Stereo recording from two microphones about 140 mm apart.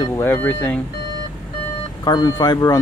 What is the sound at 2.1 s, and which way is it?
Speech, 30° left (ahead or behind).